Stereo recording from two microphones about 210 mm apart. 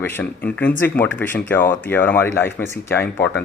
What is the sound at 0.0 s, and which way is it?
Speech, 10° left (ahead or behind).